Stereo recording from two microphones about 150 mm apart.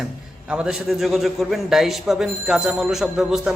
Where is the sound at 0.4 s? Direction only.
5° right (ahead or behind).